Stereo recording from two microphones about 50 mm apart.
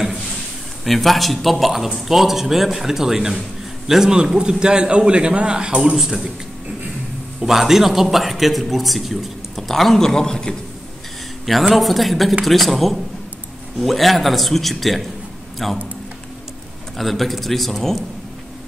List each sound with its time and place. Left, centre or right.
0.8 s a man's voice: centre
5.9 s a man's voice: centre
7.3 s a man's voice: centre
11.7 s a man's voice: centre
16.9 s a man's voice: centre